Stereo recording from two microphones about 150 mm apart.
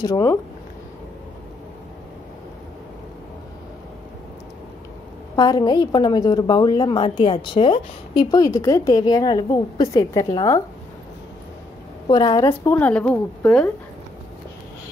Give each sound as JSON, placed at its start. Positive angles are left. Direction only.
{"t": 0.0, "sound": "a woman's voice", "side_deg": 20}
{"t": 5.3, "sound": "a woman's voice", "side_deg": 25}
{"t": 12.1, "sound": "a woman's voice", "side_deg": 25}
{"t": 12.4, "sound": "speech", "side_deg": 15}